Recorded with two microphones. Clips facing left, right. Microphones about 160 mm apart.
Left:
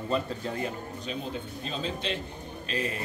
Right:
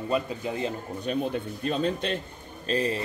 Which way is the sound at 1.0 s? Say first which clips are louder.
Right 8 dB; 55° right (ahead or behind).